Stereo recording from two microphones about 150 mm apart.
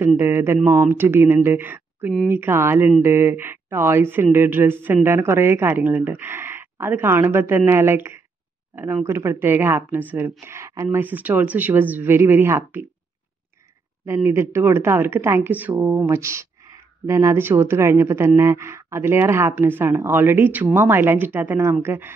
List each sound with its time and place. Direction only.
0.2 s speech: 15° right (ahead or behind)
14.0 s speech: 20° right (ahead or behind)